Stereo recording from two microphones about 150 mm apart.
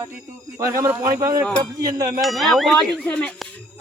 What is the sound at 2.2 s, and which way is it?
Speech, centre (ahead or behind).